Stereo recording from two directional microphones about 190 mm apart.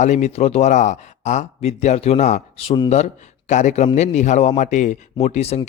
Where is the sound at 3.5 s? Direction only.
40° left (ahead or behind).